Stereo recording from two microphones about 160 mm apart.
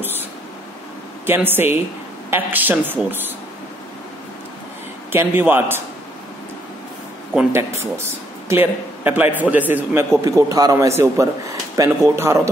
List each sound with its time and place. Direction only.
1.2 s a man's voice: 15° right (ahead or behind)
5.1 s a man's voice: 15° right (ahead or behind)
7.5 s a man's voice: 15° right (ahead or behind)